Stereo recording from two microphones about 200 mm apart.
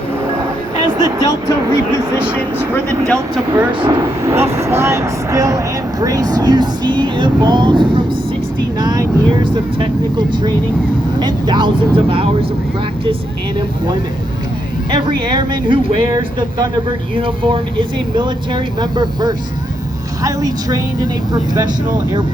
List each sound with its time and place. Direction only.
0.9 s speech: 15° left (ahead or behind)
1.9 s speech: 20° right (ahead or behind)
3.1 s speech: 5° right (ahead or behind)
3.7 s speech: 25° right (ahead or behind)
4.2 s speech: 15° right (ahead or behind)
14.8 s speech: 25° right (ahead or behind)